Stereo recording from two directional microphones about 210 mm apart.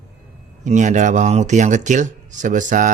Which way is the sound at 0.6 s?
35° right (ahead or behind).